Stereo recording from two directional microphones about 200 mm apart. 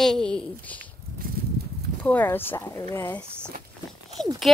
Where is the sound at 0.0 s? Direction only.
5° left (ahead or behind).